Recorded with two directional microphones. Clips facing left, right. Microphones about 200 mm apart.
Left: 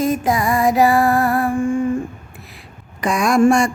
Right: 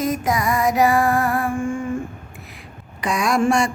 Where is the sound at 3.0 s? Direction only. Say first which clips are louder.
Left 5 dB; 50° left (ahead or behind).